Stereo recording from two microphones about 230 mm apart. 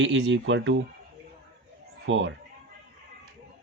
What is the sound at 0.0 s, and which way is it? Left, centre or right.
Speech, right.